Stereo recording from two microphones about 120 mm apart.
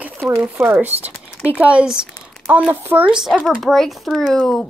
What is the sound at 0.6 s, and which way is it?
Speech, 15° right (ahead or behind).